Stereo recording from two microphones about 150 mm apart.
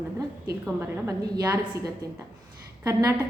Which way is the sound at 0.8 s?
20° right (ahead or behind).